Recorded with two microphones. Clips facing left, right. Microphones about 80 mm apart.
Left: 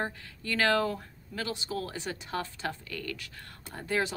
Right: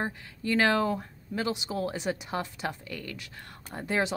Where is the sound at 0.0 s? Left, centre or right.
Centre.